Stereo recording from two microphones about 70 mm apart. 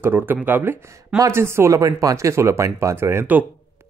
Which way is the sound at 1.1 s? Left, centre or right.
Right.